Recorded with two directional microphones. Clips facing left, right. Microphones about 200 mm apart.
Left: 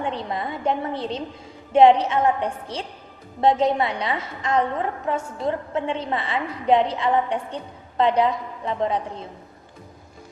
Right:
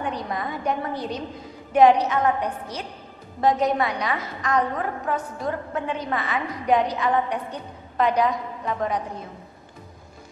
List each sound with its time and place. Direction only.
0.0 s a woman's voice: 25° left (ahead or behind)